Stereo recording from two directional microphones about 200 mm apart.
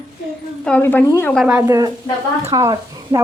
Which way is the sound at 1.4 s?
5° right (ahead or behind).